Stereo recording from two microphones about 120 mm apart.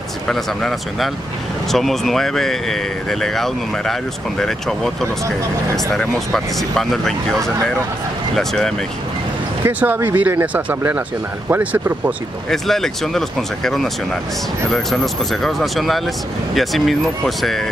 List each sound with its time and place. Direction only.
0.3 s speech: 5° left (ahead or behind)
5.9 s speech: 5° left (ahead or behind)
9.7 s speech: 15° right (ahead or behind)
12.4 s speech: 5° left (ahead or behind)
15.4 s speech: centre (ahead or behind)